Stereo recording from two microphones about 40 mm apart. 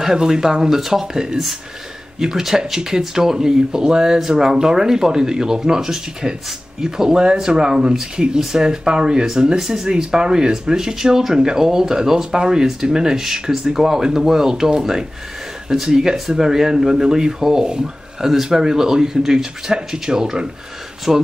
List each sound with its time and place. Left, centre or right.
0.0 s speech: centre